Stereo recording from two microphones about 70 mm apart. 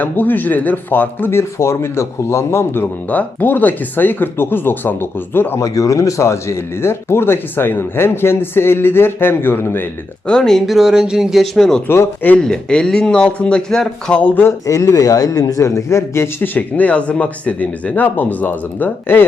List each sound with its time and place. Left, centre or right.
0.0 s speech: left
3.1 s speech: left
5.5 s speech: left
10.2 s speech: centre
11.5 s speech: centre
11.9 s speech: left
12.4 s a man's voice: centre
14.2 s speech: left
14.7 s speech: left
16.6 s speech: left